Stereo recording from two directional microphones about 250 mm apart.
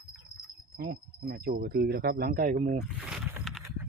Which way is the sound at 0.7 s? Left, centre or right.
Right.